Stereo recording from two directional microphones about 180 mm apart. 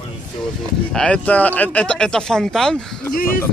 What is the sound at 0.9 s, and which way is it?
Speech, 5° left (ahead or behind).